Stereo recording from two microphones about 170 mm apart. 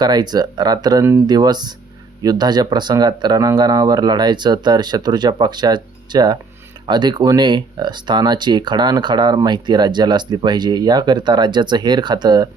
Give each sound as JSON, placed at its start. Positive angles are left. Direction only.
{"t": 0.0, "sound": "speech", "side_deg": -25}